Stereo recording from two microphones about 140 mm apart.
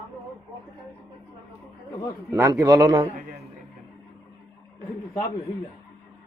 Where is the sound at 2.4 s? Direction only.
25° right (ahead or behind).